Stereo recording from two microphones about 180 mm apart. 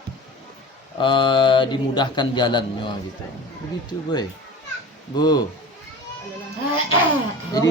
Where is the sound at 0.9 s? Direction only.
25° left (ahead or behind).